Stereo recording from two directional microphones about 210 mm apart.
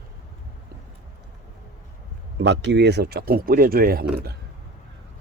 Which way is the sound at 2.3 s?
55° right (ahead or behind).